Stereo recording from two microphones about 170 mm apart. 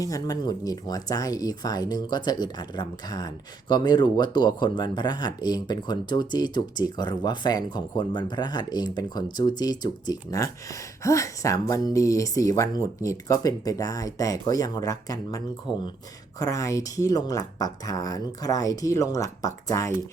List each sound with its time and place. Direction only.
0.0 s speech: 20° left (ahead or behind)
16.4 s speech: 20° left (ahead or behind)